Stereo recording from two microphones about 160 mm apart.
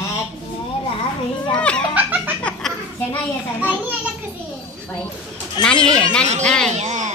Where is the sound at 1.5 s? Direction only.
5° left (ahead or behind).